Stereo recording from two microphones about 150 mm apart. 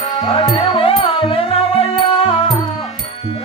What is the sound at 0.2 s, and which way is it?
Music, 35° left (ahead or behind).